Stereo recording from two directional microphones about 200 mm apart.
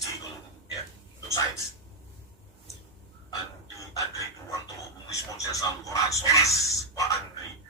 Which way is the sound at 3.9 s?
15° left (ahead or behind).